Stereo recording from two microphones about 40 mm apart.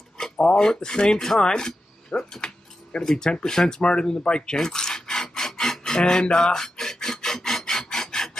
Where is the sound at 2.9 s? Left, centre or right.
Centre.